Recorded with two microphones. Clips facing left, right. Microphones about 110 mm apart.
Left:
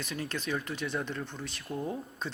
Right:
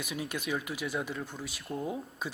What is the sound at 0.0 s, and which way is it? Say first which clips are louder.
Speech: even; 10° right (ahead or behind).